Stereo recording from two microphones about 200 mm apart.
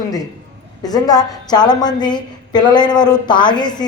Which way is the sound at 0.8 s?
20° left (ahead or behind).